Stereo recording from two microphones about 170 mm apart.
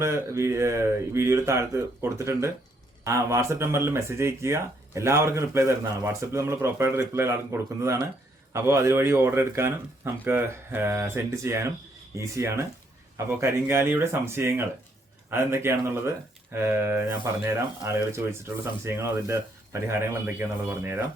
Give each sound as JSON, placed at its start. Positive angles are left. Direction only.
{"t": 0.0, "sound": "speech", "side_deg": -15}